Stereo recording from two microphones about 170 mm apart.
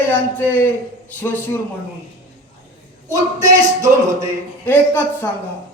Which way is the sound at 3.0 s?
20° right (ahead or behind).